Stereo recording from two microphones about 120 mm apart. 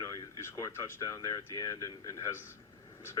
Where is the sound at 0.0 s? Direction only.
25° left (ahead or behind).